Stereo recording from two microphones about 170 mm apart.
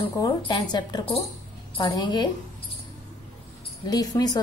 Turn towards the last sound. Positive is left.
turn(degrees=20)  # may be behind; listen again after turning